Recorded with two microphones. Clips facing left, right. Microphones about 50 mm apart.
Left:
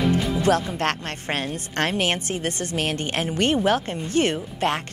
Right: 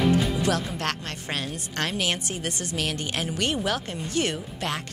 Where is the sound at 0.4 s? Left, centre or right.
Left.